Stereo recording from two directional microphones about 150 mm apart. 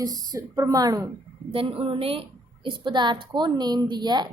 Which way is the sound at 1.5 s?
35° right (ahead or behind).